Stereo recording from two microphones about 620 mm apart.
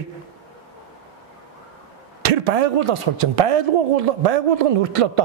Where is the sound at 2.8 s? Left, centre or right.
Right.